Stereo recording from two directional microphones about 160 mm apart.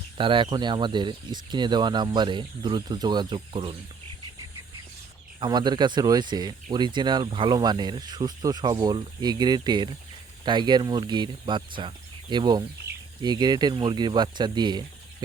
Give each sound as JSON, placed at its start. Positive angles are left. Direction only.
{"t": 0.2, "sound": "speech", "side_deg": -30}
{"t": 5.4, "sound": "speech", "side_deg": -25}